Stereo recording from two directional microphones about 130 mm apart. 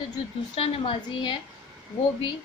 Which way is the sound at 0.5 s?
45° left (ahead or behind).